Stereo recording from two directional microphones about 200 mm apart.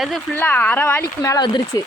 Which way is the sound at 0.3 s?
10° left (ahead or behind).